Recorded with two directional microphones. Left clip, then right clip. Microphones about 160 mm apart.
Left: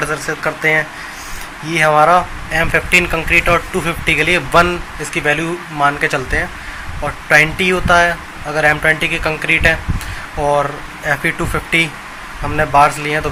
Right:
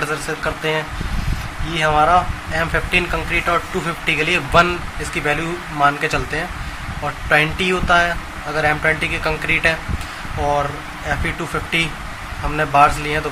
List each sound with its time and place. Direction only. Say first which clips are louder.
0.0 s speech: left 3 dB; 20° left (ahead or behind)